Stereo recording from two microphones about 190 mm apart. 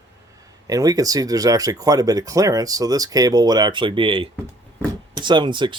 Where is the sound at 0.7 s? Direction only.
20° right (ahead or behind).